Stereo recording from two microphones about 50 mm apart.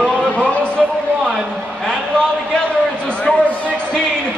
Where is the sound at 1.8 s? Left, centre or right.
Centre.